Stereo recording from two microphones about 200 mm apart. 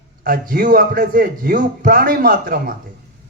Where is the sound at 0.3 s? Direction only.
45° right (ahead or behind).